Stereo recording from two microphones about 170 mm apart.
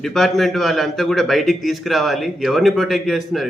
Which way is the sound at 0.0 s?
Centre (ahead or behind).